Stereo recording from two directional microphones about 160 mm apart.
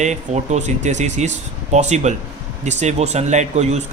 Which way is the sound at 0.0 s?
45° right (ahead or behind).